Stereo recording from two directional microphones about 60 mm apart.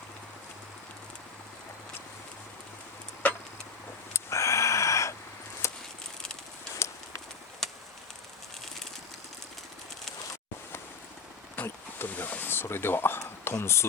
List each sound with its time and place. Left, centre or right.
3.2 s vehicle: left
4.1 s a sound: left
6.8 s clip-clop: left
7.6 s chop: centre
11.5 s speech: left